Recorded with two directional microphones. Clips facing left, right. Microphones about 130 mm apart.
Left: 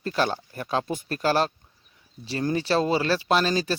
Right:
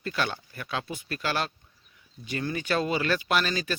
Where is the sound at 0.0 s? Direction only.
35° left (ahead or behind).